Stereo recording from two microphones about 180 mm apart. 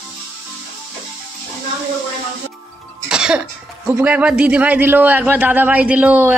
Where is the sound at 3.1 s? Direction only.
5° right (ahead or behind).